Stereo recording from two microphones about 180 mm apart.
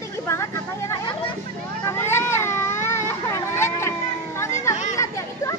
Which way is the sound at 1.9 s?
15° left (ahead or behind).